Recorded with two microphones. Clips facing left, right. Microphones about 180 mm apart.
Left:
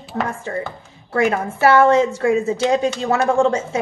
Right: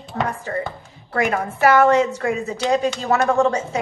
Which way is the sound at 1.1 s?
25° left (ahead or behind).